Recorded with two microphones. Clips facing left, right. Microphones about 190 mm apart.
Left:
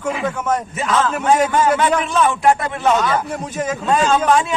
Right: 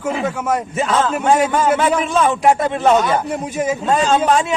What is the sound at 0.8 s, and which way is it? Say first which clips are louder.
A man's voice: right 1 dB; 30° right (ahead or behind).